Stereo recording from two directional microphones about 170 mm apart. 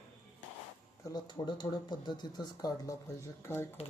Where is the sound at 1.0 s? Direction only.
25° left (ahead or behind).